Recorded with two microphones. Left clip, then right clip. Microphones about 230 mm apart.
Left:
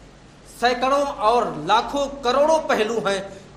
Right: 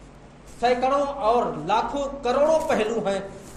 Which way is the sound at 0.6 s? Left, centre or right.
Left.